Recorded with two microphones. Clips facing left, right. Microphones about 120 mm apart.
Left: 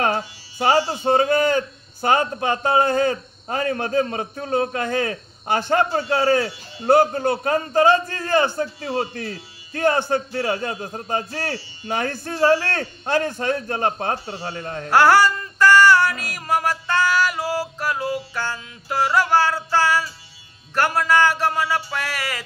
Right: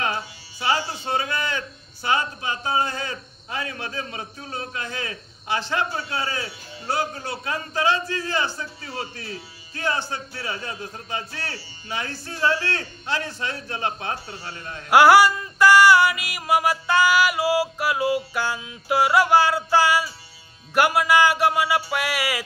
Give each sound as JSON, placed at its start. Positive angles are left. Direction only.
{"t": 0.0, "sound": "speech", "side_deg": 50}
{"t": 14.9, "sound": "music", "side_deg": -10}